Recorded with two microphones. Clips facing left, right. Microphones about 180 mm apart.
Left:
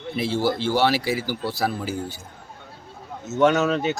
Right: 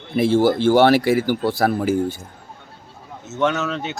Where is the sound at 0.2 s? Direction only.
50° right (ahead or behind).